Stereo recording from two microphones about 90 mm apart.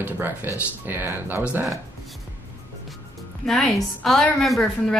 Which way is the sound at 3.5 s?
Centre (ahead or behind).